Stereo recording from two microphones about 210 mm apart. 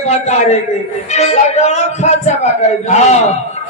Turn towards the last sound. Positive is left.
turn(degrees=30)  # may be behind; listen again after turning